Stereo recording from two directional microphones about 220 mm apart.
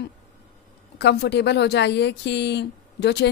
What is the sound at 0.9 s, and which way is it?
Speech, 50° left (ahead or behind).